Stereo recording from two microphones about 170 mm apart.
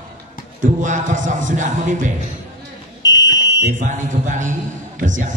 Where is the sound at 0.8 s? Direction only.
50° right (ahead or behind).